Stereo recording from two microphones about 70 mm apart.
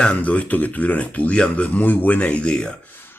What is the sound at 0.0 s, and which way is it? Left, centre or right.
Speech, centre.